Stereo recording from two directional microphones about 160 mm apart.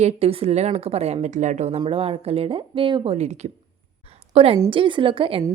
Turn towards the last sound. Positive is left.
turn(degrees=-35)  # may be behind; listen again after turning